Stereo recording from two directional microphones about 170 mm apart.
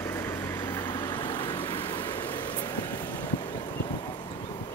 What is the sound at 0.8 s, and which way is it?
Vehicle, 25° left (ahead or behind).